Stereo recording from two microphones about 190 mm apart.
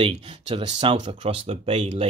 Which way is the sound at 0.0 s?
30° right (ahead or behind).